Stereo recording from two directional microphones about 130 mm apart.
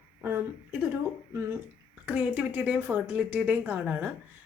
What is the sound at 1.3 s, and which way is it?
Speech, 20° right (ahead or behind).